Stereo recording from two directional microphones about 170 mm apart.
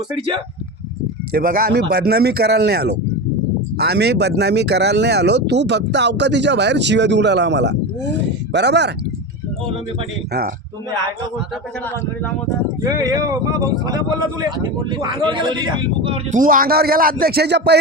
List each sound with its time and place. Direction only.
1.3 s speech: 55° right (ahead or behind)
2.0 s speech: 70° right (ahead or behind)
12.8 s speech: 20° right (ahead or behind)
16.3 s speech: 55° right (ahead or behind); by 17.7 s 75° right (ahead or behind)